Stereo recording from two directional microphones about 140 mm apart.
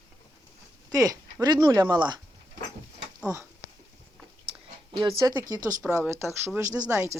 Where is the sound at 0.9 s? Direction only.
25° right (ahead or behind).